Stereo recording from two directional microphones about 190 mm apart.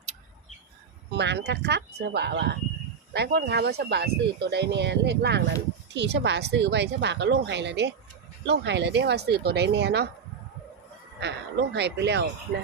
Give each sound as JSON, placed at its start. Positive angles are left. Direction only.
{"t": 1.1, "sound": "speech", "side_deg": -65}
{"t": 11.2, "sound": "speech", "side_deg": -65}